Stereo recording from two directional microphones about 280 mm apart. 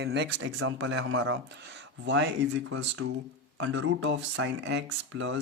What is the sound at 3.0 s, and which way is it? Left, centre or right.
Speech, right.